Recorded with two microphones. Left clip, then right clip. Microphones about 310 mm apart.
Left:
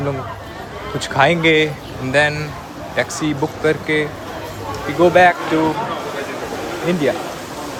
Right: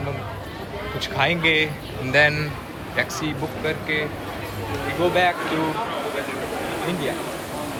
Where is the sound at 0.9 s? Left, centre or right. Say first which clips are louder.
Left 7 dB; left.